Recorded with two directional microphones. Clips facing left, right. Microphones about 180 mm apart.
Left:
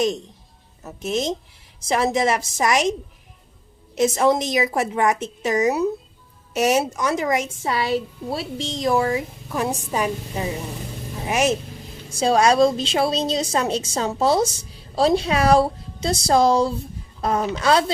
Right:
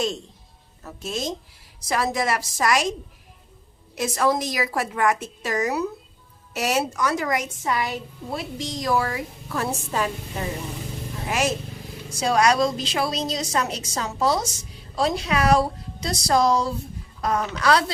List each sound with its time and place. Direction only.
0.8 s a woman's voice: 20° left (ahead or behind)
3.9 s a woman's voice: 20° left (ahead or behind)